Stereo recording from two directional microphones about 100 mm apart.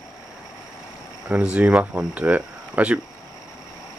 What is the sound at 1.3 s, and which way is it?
Speech, 10° right (ahead or behind).